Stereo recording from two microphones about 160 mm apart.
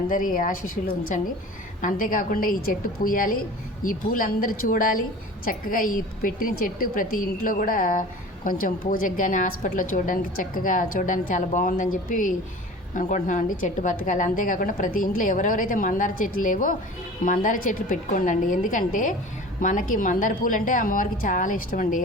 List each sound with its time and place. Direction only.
0.1 s a woman's voice: 60° left (ahead or behind)